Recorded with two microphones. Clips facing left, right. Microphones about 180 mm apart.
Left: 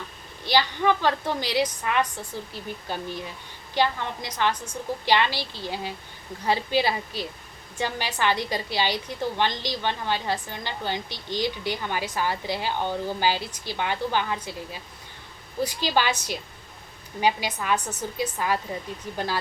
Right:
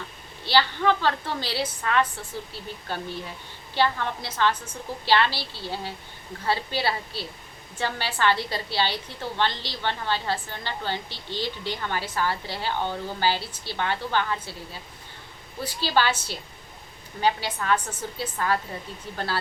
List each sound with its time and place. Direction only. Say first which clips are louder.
0.4 s a woman's voice: even; 15° left (ahead or behind)